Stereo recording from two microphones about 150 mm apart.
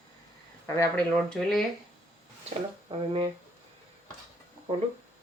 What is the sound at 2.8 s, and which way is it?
Speech, 35° right (ahead or behind).